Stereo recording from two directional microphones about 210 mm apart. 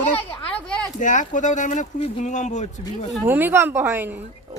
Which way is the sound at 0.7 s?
5° left (ahead or behind).